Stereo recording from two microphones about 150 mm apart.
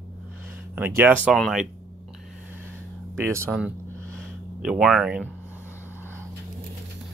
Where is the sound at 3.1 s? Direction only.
15° right (ahead or behind).